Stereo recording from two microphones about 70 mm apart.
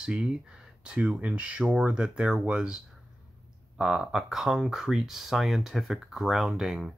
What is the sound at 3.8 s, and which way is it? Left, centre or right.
Speech, centre.